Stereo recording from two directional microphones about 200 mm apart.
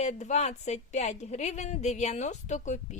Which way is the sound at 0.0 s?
35° left (ahead or behind).